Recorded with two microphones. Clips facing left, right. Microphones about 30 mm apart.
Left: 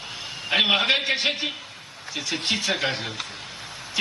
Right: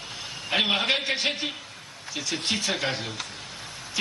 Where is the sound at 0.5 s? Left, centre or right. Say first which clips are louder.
Left 4 dB; centre.